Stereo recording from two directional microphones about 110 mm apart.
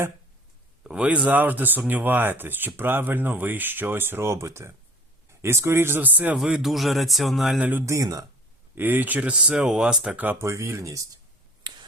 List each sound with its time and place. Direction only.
0.9 s a man's voice: 10° right (ahead or behind)
6.3 s speech: 5° right (ahead or behind)
7.6 s speech: 20° right (ahead or behind)
7.9 s speech: 30° right (ahead or behind)
8.7 s speech: 15° right (ahead or behind)
11.6 s a sound: 45° right (ahead or behind)